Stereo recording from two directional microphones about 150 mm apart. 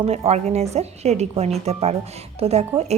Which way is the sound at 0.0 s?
40° right (ahead or behind).